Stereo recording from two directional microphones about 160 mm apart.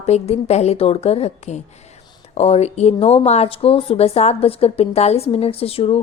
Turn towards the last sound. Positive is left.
turn(degrees=40)  # may be behind; listen again after turning